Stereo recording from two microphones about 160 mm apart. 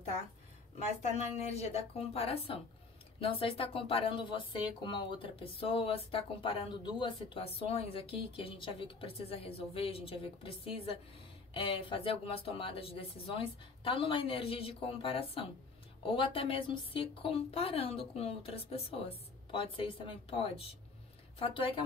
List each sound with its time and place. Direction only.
1.2 s a woman's voice: 45° left (ahead or behind)